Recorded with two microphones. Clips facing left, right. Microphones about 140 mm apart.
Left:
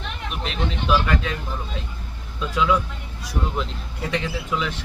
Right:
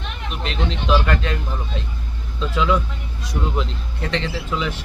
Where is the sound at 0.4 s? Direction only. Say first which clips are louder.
Right 2 dB; 5° left (ahead or behind).